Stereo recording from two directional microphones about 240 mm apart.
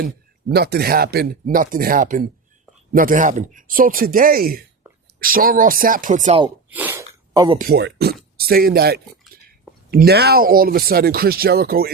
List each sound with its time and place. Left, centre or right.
0.5 s speech: right
6.7 s sneeze: centre
7.6 s speech: right